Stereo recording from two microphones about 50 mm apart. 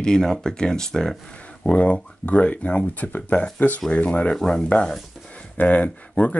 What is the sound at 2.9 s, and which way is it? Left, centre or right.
Speech, left.